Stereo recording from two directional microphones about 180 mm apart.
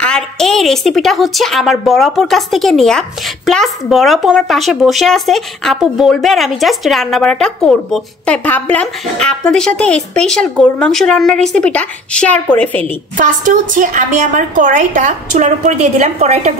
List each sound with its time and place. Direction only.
0.0 s a woman's voice: 5° left (ahead or behind)
13.2 s a woman's voice: 45° right (ahead or behind)